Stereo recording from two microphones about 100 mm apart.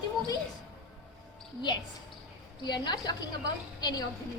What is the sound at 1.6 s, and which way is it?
A woman's voice, 50° left (ahead or behind).